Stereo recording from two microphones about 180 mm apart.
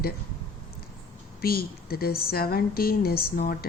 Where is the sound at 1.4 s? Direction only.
55° left (ahead or behind).